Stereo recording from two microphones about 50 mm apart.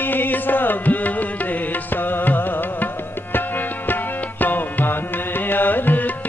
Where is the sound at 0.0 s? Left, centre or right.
Left.